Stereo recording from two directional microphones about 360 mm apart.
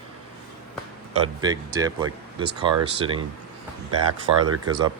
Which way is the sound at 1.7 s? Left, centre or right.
Centre.